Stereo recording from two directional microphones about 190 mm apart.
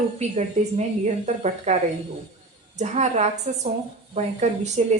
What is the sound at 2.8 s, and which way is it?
A woman's voice, 35° right (ahead or behind).